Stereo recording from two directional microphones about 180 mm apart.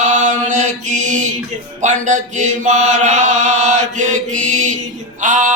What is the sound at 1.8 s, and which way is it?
Chant, 40° right (ahead or behind).